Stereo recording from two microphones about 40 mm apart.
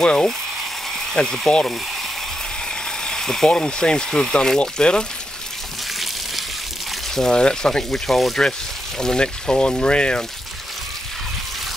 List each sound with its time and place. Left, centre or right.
0.0 s speech: centre
3.0 s speech: centre
7.2 s speech: centre
8.1 s speech: centre
9.0 s speech: centre